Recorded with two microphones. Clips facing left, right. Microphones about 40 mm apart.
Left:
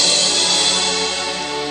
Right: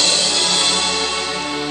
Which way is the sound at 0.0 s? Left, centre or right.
Centre.